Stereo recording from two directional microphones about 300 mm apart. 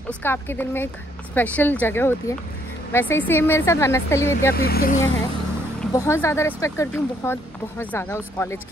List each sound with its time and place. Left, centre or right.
0.2 s a woman's voice: centre
4.6 s speech: left
5.8 s a woman's voice: centre